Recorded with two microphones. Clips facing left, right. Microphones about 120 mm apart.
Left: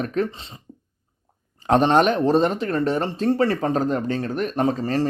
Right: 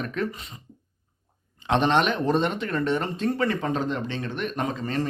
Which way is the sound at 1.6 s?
40° left (ahead or behind).